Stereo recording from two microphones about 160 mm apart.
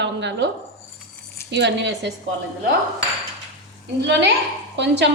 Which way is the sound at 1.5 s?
90° right.